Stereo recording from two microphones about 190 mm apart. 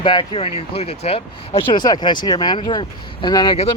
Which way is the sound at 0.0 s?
25° left (ahead or behind).